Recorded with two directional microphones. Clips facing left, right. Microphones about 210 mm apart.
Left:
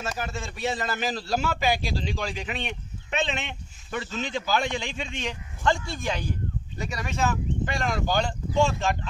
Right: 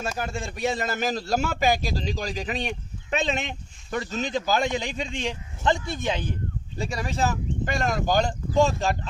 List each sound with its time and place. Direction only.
0.5 s a man's voice: 45° right (ahead or behind)
5.6 s speech: 20° right (ahead or behind)
6.8 s a man's voice: 30° right (ahead or behind)